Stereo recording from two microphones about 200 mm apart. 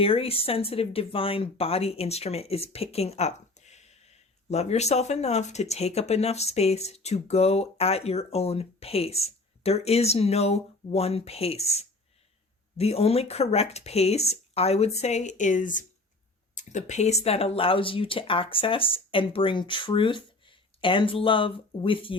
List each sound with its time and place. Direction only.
0.0 s speech: 30° left (ahead or behind)